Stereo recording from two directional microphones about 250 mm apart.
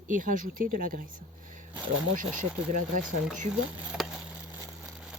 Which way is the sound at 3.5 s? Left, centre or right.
Centre.